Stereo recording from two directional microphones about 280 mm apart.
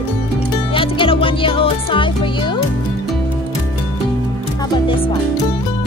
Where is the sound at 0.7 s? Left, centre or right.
Centre.